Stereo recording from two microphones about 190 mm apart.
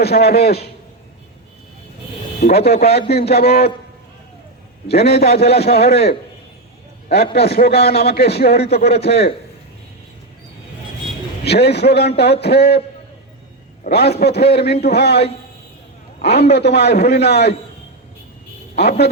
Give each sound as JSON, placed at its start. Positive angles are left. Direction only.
{"t": 0.0, "sound": "a man's voice", "side_deg": 60}
{"t": 2.4, "sound": "a man's voice", "side_deg": 60}
{"t": 4.9, "sound": "a man's voice", "side_deg": 60}
{"t": 7.3, "sound": "a man's voice", "side_deg": 55}
{"t": 11.4, "sound": "a man's voice", "side_deg": 60}
{"t": 13.8, "sound": "a man's voice", "side_deg": 60}
{"t": 18.8, "sound": "a man's voice", "side_deg": 60}